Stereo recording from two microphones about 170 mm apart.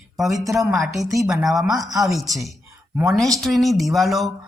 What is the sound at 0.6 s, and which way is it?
Speech, centre (ahead or behind).